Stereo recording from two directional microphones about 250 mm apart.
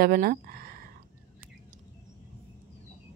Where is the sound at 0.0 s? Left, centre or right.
Right.